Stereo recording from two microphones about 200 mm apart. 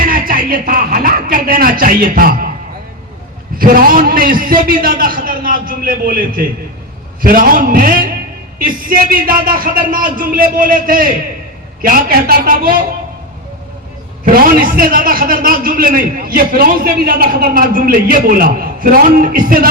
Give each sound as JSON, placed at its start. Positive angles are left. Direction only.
{"t": 0.0, "sound": "a sound", "side_deg": -45}
{"t": 3.6, "sound": "a man's voice", "side_deg": -45}
{"t": 14.4, "sound": "a man's voice", "side_deg": -45}